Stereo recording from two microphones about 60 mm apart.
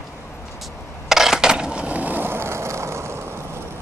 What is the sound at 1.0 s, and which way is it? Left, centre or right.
Skateboard, centre.